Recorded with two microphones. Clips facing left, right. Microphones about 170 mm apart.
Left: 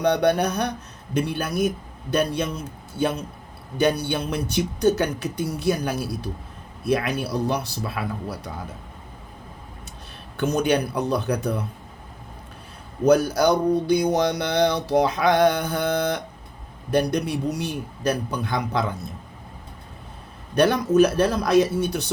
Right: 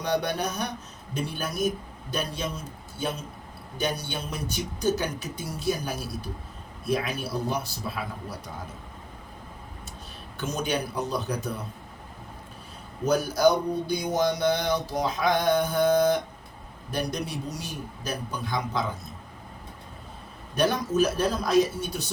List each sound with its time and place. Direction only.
0.0 s speech: 65° left (ahead or behind)
10.3 s speech: 60° left (ahead or behind)
13.1 s speech: 70° left (ahead or behind)
20.6 s speech: 65° left (ahead or behind)